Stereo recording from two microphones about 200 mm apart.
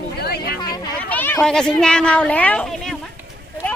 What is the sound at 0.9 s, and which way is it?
Speech, 10° left (ahead or behind).